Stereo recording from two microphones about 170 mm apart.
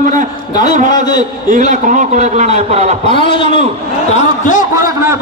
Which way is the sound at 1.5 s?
45° right (ahead or behind).